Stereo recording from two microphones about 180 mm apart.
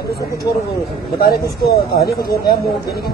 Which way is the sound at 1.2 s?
60° left (ahead or behind).